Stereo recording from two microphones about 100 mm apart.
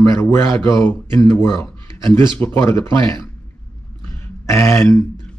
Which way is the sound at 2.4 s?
25° left (ahead or behind).